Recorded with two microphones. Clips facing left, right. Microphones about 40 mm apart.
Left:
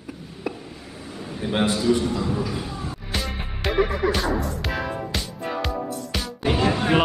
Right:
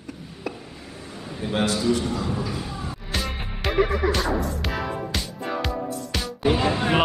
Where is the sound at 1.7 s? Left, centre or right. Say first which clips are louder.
Left 2 dB; centre.